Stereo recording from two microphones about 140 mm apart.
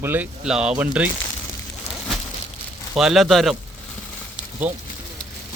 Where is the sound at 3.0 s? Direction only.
Centre (ahead or behind).